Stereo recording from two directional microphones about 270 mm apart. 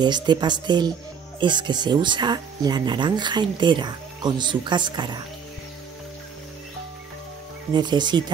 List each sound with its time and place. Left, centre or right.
0.0 s speech: centre
7.7 s speech: centre